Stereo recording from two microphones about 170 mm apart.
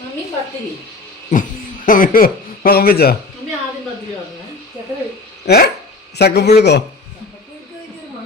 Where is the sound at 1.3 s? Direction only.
50° left (ahead or behind).